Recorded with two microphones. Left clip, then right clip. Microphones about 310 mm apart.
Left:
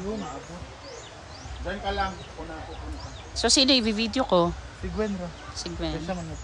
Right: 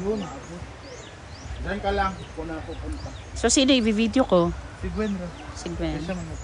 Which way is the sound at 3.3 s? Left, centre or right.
Centre.